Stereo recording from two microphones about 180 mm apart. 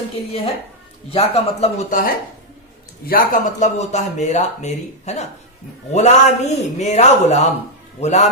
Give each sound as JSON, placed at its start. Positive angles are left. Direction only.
{"t": 1.1, "sound": "speech", "side_deg": 35}